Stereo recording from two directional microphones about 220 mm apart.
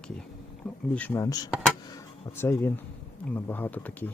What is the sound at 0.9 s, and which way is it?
Speech, 10° left (ahead or behind).